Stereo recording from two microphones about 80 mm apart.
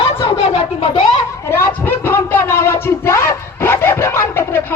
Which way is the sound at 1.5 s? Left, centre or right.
Left.